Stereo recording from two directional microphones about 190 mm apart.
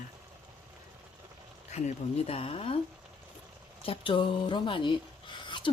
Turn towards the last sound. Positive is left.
turn(degrees=25)  # may be behind; listen again after turning